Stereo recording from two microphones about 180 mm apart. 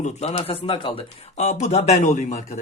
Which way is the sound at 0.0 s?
40° left (ahead or behind).